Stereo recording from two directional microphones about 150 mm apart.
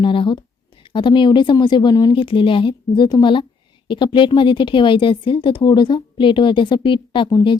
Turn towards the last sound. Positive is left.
turn(degrees=35)  # may be behind; listen again after turning